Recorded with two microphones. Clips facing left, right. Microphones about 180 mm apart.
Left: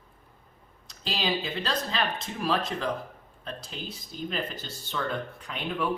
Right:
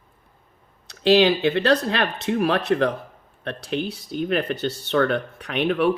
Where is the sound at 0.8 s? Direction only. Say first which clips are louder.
Right 15 dB; 70° right (ahead or behind).